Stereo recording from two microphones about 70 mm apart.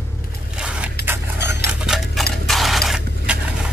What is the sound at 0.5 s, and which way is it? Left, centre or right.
Scrape, centre.